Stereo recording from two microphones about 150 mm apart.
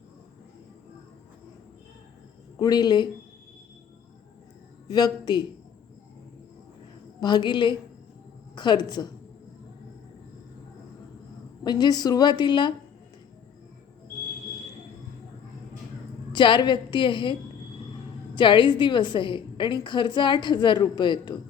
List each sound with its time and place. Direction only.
2.6 s a woman's voice: 25° left (ahead or behind)
4.9 s a woman's voice: 25° left (ahead or behind)
7.2 s a woman's voice: 30° left (ahead or behind)
11.6 s a woman's voice: 30° left (ahead or behind)
16.3 s a woman's voice: 30° left (ahead or behind)
18.3 s a woman's voice: 30° left (ahead or behind)